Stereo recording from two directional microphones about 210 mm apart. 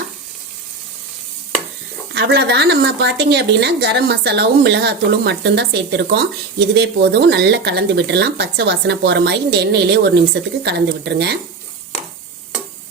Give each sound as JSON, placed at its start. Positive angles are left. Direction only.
{"t": 2.1, "sound": "a woman's voice", "side_deg": -50}